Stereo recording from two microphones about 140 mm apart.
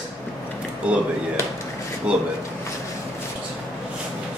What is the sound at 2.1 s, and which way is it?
Speech, 10° right (ahead or behind).